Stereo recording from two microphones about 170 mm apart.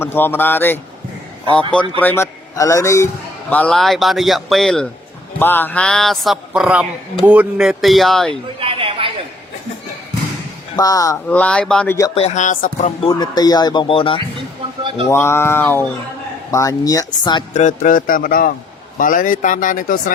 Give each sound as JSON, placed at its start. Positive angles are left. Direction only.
{"t": 0.0, "sound": "a man's voice", "side_deg": 10}
{"t": 3.5, "sound": "a sound", "side_deg": 5}
{"t": 8.3, "sound": "a sound", "side_deg": -30}
{"t": 10.8, "sound": "speech", "side_deg": 20}
{"t": 11.3, "sound": "a man's voice", "side_deg": 5}
{"t": 12.1, "sound": "speech", "side_deg": 40}
{"t": 13.0, "sound": "speech", "side_deg": 30}
{"t": 15.1, "sound": "a man's voice", "side_deg": 15}
{"t": 17.5, "sound": "a man's voice", "side_deg": 45}